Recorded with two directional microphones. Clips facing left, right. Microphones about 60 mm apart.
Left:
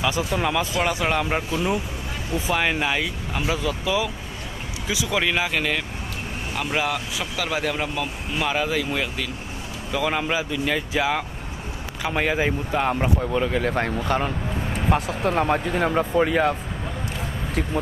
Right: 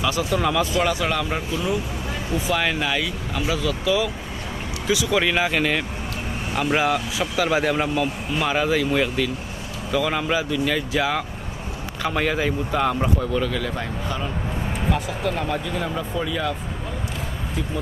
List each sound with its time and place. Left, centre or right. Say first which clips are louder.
0.0 s speech: right 1 dB; centre
2.4 s speech: left 1 dB; centre
5.1 s speech: right 1 dB; centre
9.9 s speech: right 1 dB; centre
13.7 s a man's voice: left 5 dB; left
14.9 s speech: left 3 dB; left